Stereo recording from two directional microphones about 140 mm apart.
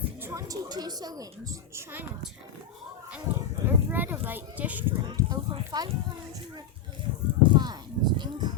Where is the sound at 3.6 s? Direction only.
15° right (ahead or behind).